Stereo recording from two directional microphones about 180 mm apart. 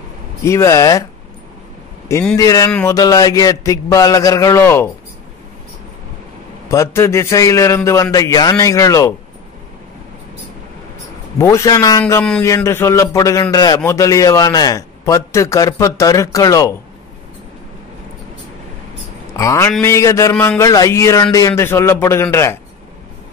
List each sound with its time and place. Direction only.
0.5 s speech: 15° left (ahead or behind)
2.3 s a man's voice: 20° left (ahead or behind)
6.7 s speech: 15° left (ahead or behind)
11.3 s speech: 15° left (ahead or behind)
12.2 s speech: 10° left (ahead or behind)
19.3 s speech: 15° left (ahead or behind)